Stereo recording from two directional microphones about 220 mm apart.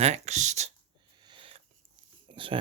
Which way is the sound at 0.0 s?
30° right (ahead or behind).